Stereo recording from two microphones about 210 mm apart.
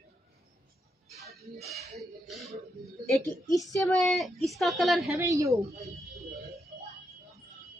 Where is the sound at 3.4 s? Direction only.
15° left (ahead or behind).